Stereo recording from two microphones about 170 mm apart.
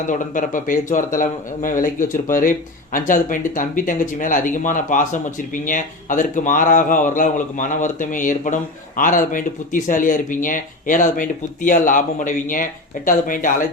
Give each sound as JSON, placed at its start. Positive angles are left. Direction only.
{"t": 0.1, "sound": "speech", "side_deg": 50}